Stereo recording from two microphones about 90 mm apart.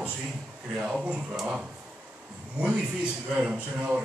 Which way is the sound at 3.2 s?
10° right (ahead or behind).